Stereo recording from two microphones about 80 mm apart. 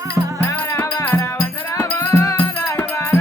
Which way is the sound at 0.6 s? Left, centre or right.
Left.